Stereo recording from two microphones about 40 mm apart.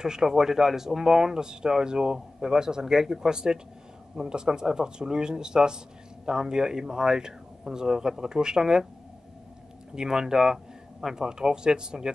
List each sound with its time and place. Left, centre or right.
0.0 s speech: centre
9.9 s speech: centre